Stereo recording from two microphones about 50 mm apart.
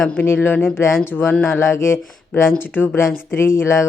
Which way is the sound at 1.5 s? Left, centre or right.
Left.